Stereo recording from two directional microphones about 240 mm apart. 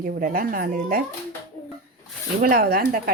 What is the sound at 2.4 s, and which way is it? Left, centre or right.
Speech, right.